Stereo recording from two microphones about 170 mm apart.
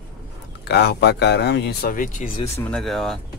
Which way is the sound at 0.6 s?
80° left.